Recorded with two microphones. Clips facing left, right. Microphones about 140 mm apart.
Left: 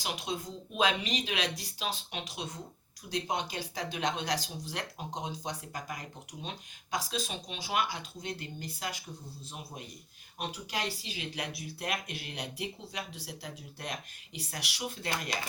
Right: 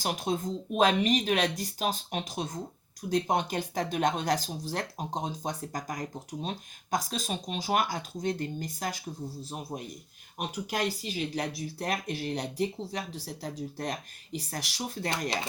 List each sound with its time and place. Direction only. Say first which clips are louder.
0.0 s speech: right 6 dB; 45° right (ahead or behind)